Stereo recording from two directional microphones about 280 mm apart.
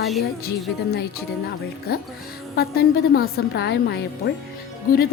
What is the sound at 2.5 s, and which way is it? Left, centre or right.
A woman's voice, left.